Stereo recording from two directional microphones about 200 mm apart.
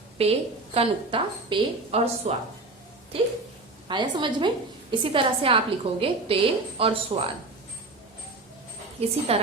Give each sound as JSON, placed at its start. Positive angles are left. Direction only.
{"t": 0.2, "sound": "a woman's voice", "side_deg": -30}
{"t": 9.0, "sound": "a woman's voice", "side_deg": -30}